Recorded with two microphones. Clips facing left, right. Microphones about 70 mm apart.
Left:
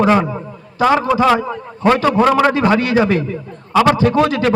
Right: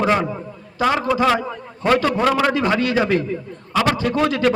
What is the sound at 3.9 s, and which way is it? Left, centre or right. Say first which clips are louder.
Speech: left 5 dB; left.